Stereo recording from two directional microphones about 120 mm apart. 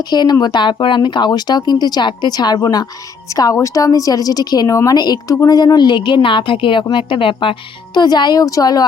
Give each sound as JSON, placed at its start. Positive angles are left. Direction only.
{"t": 0.0, "sound": "a woman's voice", "side_deg": 35}